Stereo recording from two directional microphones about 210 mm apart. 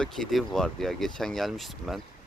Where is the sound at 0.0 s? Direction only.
Centre (ahead or behind).